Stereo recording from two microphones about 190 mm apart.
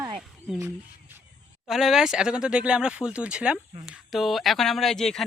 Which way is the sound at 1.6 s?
Centre (ahead or behind).